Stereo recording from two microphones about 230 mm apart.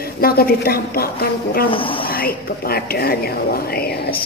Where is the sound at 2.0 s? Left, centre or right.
Left.